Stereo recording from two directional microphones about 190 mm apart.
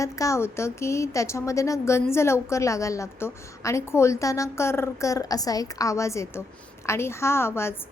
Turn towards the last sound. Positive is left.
turn(degrees=15)  # may be behind; listen again after turning